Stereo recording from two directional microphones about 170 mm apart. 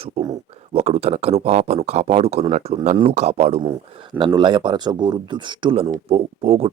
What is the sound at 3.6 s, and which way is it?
Speech, 25° right (ahead or behind).